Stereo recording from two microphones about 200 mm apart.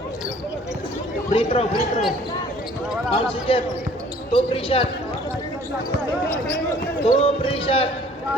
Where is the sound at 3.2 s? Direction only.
25° left (ahead or behind).